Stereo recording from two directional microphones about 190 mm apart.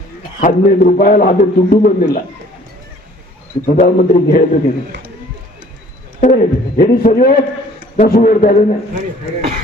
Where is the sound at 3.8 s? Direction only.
50° left (ahead or behind).